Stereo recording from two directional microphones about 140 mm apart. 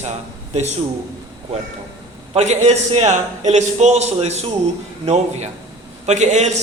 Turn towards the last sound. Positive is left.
turn(degrees=-55)  # may be behind; listen again after turning